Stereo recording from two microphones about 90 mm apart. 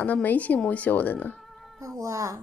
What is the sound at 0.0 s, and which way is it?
Speech, 20° left (ahead or behind).